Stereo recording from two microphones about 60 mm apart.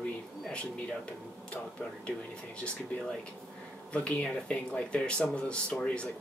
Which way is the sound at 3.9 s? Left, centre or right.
Left.